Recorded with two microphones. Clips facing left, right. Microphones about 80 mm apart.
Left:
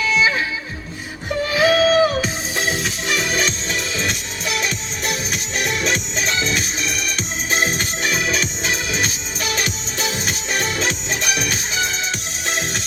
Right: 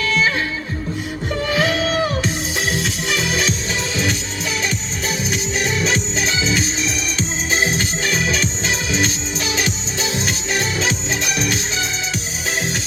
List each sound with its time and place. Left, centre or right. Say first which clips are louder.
0.0 s music: left 1 dB; centre
1.3 s music: left 3 dB; centre